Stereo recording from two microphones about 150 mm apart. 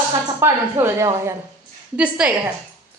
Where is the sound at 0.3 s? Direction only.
20° right (ahead or behind).